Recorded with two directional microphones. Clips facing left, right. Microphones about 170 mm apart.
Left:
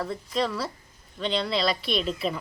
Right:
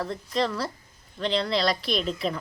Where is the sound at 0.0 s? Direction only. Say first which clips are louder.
Right 1 dB; centre (ahead or behind).